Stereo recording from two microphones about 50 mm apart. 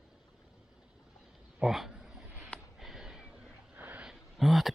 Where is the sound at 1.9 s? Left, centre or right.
Centre.